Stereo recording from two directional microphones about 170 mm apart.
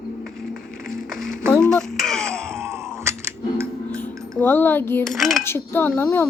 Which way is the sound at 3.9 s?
10° left (ahead or behind).